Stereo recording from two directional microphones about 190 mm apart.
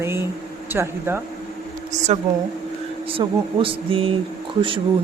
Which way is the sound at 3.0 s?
30° right (ahead or behind).